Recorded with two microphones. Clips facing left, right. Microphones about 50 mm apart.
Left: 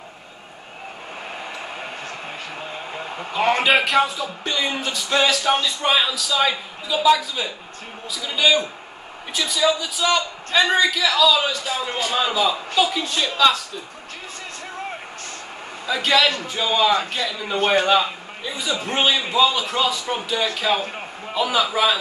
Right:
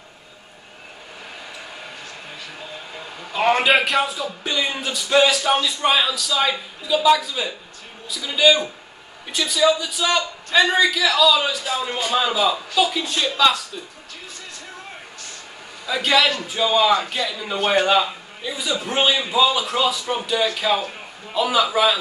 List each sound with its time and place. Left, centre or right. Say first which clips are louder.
2.9 s a sound: left 5 dB; left
3.6 s a man's voice: left 1 dB; centre
15.9 s a man's voice: even; centre